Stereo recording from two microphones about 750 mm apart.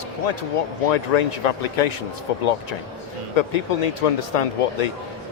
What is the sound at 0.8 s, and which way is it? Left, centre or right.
Speech, left.